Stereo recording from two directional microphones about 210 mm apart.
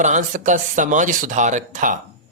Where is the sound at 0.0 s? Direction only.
35° right (ahead or behind).